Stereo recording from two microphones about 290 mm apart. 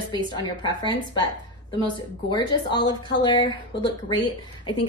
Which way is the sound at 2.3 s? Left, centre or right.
Centre.